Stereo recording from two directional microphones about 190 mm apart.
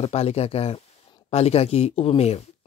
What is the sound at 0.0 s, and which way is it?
Speech, 35° left (ahead or behind).